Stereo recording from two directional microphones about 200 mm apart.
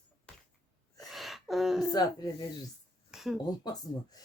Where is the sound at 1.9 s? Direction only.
20° left (ahead or behind).